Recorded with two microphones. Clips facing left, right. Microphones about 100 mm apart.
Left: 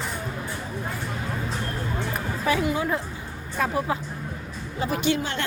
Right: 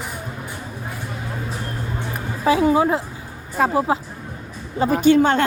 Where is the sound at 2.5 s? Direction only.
30° right (ahead or behind).